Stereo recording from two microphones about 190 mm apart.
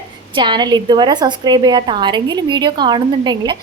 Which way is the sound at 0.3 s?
25° right (ahead or behind).